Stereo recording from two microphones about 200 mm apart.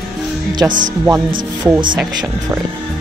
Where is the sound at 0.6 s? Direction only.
10° right (ahead or behind).